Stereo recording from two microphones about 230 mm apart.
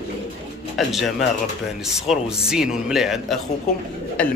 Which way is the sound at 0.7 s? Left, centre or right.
Centre.